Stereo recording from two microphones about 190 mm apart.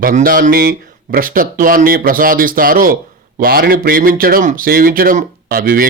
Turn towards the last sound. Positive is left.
turn(degrees=-50)  # may be behind; listen again after turning